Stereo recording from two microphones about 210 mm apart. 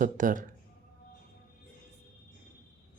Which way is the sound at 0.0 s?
40° right (ahead or behind).